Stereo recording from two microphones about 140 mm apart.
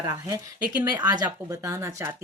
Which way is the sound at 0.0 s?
25° right (ahead or behind).